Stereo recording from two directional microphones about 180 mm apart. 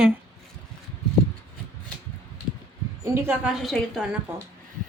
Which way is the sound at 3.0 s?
15° right (ahead or behind).